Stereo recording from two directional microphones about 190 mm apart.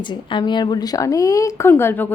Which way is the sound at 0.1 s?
25° left (ahead or behind).